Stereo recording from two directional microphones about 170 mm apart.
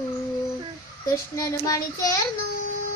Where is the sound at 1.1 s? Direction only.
20° left (ahead or behind).